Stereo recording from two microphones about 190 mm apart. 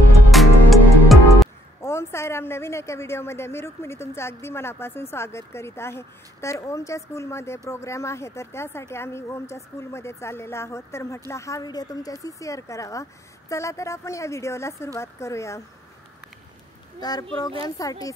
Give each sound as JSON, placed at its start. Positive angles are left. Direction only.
{"t": 0.3, "sound": "music", "side_deg": 0}
{"t": 1.8, "sound": "a woman's voice", "side_deg": 15}
{"t": 17.0, "sound": "speech", "side_deg": 20}